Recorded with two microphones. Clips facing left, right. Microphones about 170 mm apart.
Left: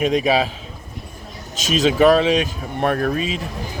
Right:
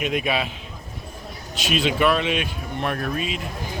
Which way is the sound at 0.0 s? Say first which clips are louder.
Left 6 dB; 35° left (ahead or behind).